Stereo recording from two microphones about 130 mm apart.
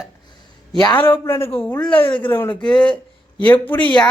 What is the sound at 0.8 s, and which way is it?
Speech, 35° left (ahead or behind).